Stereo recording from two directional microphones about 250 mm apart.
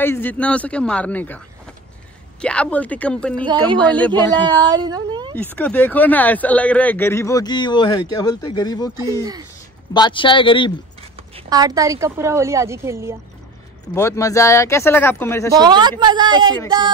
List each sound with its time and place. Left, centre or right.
0.0 s a man's voice: centre
2.4 s a man's voice: centre
4.4 s speech: centre
5.3 s speech: centre
9.9 s speech: centre
11.3 s a woman's voice: centre
13.9 s speech: centre
15.5 s a woman's voice: centre